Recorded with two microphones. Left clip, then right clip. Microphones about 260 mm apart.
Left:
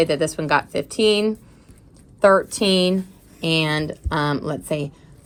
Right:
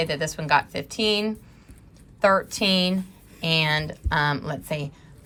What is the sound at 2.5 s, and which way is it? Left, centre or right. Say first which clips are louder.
A woman's voice: left 4 dB; right.